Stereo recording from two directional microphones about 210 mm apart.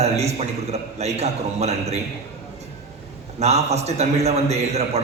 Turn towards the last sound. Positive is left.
turn(degrees=-30)  # may be behind; listen again after turning